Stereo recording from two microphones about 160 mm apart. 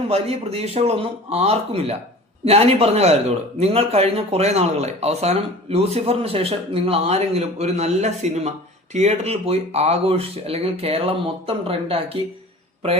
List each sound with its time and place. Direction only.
0.1 s speech: 40° right (ahead or behind)